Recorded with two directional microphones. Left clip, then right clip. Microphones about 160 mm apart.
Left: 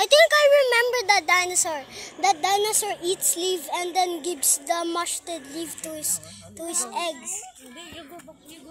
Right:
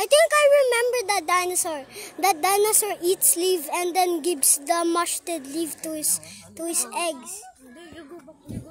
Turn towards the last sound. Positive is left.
turn(degrees=-45)  # may be behind; listen again after turning